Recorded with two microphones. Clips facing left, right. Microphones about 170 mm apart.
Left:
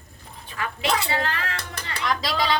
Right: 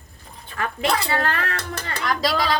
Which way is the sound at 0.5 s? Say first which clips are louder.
Right 2 dB; 50° right (ahead or behind).